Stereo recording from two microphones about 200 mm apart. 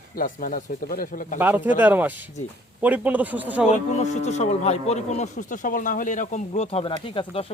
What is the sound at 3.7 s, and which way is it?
Speech, 35° left (ahead or behind).